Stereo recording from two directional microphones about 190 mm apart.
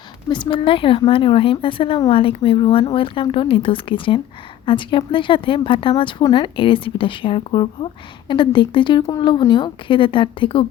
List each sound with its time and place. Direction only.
0.3 s speech: 25° left (ahead or behind)